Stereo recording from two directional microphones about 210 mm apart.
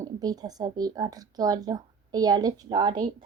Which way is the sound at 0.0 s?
20° right (ahead or behind).